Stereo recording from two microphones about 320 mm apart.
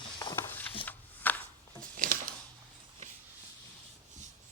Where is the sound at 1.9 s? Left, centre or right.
Right.